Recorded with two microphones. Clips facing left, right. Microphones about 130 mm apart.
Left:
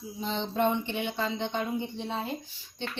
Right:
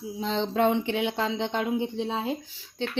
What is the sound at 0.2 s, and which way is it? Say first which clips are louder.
Speech: right 4 dB; 90° right.